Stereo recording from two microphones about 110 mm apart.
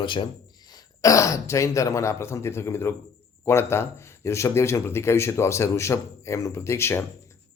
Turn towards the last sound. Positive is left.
turn(degrees=25)  # may be behind; listen again after turning